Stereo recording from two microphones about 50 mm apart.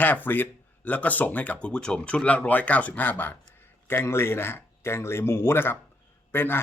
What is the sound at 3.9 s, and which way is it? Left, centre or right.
A man's voice, left.